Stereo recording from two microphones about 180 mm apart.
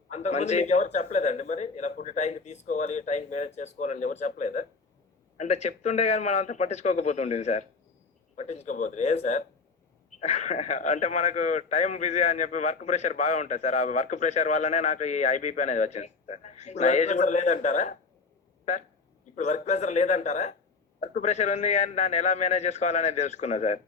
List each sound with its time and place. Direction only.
0.1 s speech: 40° left (ahead or behind)
19.4 s speech: 40° left (ahead or behind)